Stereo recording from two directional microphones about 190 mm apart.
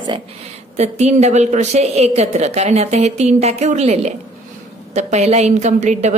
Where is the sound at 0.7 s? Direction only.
35° right (ahead or behind).